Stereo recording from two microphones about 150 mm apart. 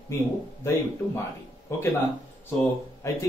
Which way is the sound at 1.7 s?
15° left (ahead or behind).